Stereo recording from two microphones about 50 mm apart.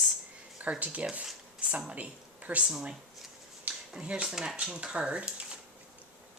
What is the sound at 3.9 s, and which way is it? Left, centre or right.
Speech, centre.